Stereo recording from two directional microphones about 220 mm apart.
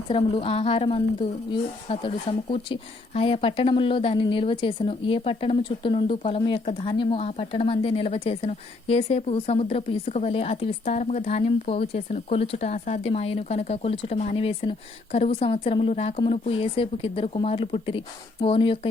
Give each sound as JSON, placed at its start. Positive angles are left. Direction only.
{"t": 0.1, "sound": "a woman's voice", "side_deg": 25}